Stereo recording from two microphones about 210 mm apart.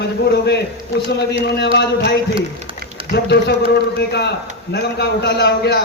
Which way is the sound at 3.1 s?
50° left (ahead or behind).